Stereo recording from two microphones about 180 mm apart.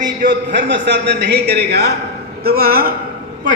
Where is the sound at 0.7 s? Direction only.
75° right (ahead or behind); by 2.9 s 55° right (ahead or behind).